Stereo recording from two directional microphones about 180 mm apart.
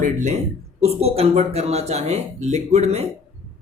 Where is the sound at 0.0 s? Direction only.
45° right (ahead or behind).